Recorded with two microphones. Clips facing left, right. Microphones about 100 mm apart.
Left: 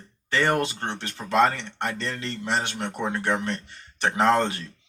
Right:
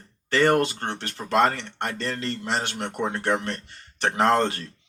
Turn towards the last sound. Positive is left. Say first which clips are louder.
# even
turn(degrees=-50)  # may be behind; listen again after turning